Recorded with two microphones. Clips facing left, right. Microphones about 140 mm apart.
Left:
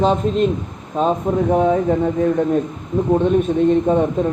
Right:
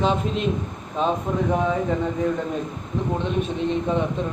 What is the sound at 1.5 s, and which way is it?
Speech, 35° left (ahead or behind).